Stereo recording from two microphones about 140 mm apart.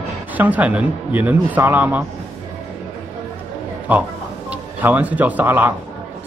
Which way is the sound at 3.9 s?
10° right (ahead or behind).